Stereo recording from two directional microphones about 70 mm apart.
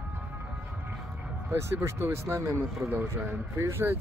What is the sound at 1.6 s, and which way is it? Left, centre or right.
Speech, right.